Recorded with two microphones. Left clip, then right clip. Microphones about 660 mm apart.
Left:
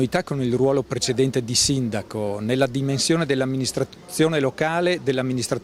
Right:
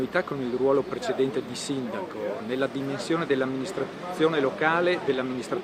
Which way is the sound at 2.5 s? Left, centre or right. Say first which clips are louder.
Left 8 dB; left.